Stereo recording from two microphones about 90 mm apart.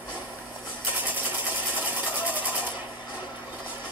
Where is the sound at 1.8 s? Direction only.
20° right (ahead or behind).